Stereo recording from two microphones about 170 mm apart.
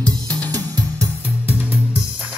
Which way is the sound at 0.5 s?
20° right (ahead or behind).